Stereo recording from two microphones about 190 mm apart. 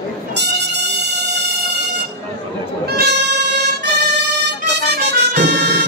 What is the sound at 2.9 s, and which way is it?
Music, 60° right (ahead or behind).